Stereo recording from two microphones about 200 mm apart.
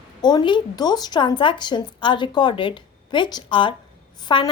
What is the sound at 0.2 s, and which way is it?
A woman's voice, 20° left (ahead or behind).